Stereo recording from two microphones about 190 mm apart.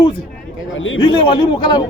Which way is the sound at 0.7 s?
90° left.